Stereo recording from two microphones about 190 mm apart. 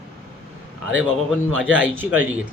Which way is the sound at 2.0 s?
10° right (ahead or behind).